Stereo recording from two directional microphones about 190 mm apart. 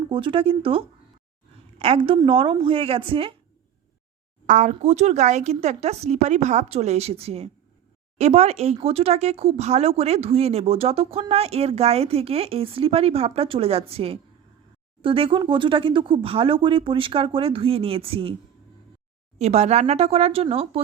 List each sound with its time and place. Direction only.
0.1 s speech: 25° right (ahead or behind)
4.4 s speech: 40° right (ahead or behind)
19.4 s speech: 35° right (ahead or behind)